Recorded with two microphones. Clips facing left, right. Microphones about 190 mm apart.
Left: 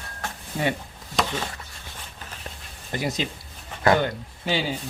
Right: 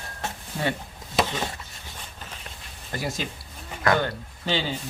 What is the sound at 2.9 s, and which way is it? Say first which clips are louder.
Speech: left 3 dB; 20° left (ahead or behind).